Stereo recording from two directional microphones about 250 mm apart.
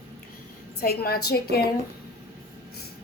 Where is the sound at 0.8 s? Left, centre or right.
Left.